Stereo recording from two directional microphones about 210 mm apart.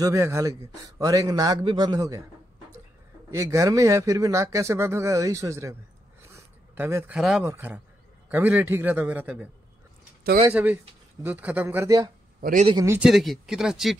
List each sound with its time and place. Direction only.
0.0 s speech: 15° right (ahead or behind)
3.3 s speech: 15° right (ahead or behind)
6.3 s a sound: 10° right (ahead or behind)
7.4 s speech: 10° right (ahead or behind)
10.5 s speech: 10° right (ahead or behind)
12.4 s speech: 40° right (ahead or behind)
12.6 s speech: 15° right (ahead or behind)